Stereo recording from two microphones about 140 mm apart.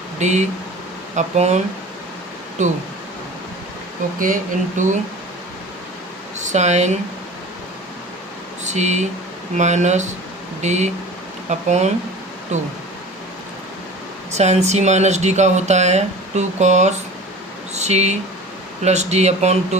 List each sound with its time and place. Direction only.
0.2 s speech: 55° right (ahead or behind)
4.8 s speech: 65° right (ahead or behind)
6.4 s speech: 55° right (ahead or behind)
8.6 s speech: 55° right (ahead or behind)
14.3 s speech: 50° right (ahead or behind)